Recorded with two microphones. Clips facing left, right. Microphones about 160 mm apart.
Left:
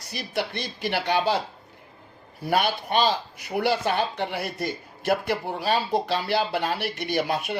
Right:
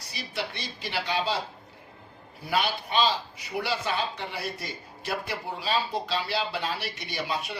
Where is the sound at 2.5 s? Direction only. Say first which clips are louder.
Left 4 dB; 55° left (ahead or behind).